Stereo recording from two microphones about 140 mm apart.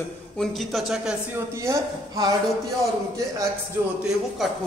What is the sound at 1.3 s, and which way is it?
Speech, 20° right (ahead or behind).